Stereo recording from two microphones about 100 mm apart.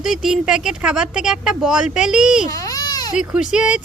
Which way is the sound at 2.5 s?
35° left (ahead or behind).